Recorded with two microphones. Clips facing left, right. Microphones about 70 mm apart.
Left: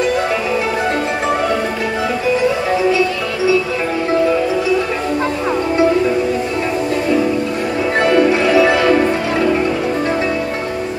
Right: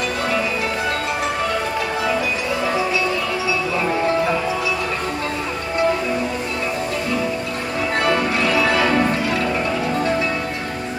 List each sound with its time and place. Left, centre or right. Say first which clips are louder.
8.0 s music: left 7 dB; left